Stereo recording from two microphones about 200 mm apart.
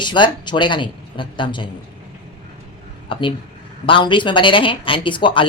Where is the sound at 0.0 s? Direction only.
25° left (ahead or behind).